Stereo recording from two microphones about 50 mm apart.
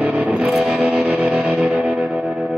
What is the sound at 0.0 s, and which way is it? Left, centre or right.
Music, right.